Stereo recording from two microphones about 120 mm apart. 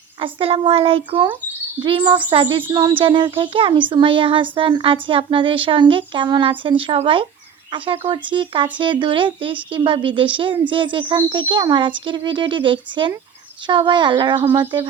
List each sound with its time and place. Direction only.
0.2 s a woman's voice: 50° right (ahead or behind)